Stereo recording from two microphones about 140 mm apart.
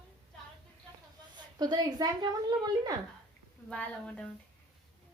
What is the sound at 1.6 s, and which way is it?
Speech, 30° right (ahead or behind).